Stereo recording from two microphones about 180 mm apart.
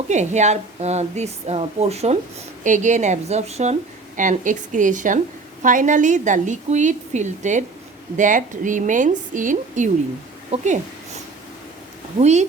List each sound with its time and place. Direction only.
0.1 s a woman's voice: 40° right (ahead or behind)
12.2 s a woman's voice: 40° right (ahead or behind)